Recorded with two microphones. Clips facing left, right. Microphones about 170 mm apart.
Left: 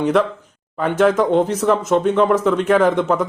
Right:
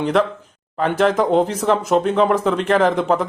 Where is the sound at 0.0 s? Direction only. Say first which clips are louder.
Left 1 dB; centre (ahead or behind).